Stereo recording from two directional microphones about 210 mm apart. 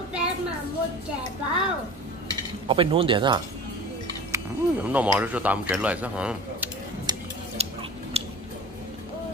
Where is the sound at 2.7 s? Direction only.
25° right (ahead or behind).